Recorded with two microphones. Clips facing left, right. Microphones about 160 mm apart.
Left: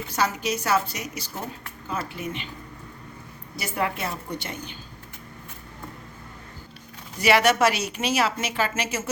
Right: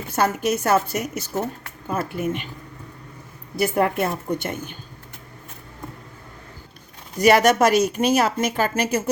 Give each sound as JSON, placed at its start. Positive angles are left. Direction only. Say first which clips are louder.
{"t": 0.1, "sound": "speech", "louder": "right 5 dB", "side_deg": -50}
{"t": 3.5, "sound": "speech", "louder": "right 8 dB", "side_deg": -55}
{"t": 7.2, "sound": "speech", "louder": "right 4 dB", "side_deg": -45}